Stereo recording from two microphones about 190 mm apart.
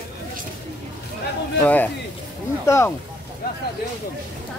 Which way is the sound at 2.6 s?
15° left (ahead or behind).